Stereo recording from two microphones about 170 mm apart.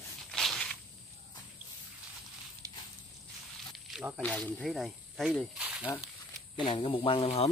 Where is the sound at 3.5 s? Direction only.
Centre (ahead or behind).